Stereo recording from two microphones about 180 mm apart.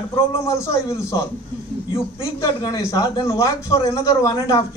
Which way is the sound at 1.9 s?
25° left (ahead or behind).